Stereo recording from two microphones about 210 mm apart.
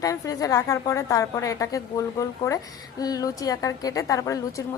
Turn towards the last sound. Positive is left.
turn(degrees=15)  # may be behind; listen again after turning